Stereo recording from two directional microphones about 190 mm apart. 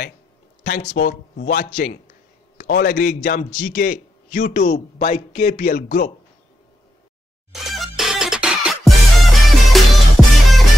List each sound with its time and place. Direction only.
0.7 s a man's voice: 55° left (ahead or behind)
7.5 s music: centre (ahead or behind)